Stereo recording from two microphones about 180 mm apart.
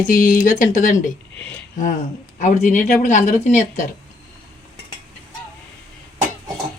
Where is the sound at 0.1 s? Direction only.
50° left (ahead or behind).